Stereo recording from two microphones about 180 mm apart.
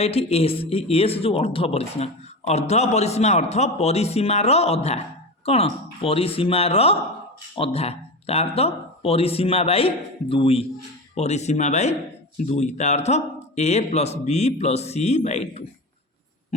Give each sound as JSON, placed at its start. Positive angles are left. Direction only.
{"t": 0.0, "sound": "a man's voice", "side_deg": 35}